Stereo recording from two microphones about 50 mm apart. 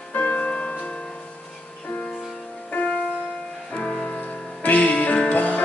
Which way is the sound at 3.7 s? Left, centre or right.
Left.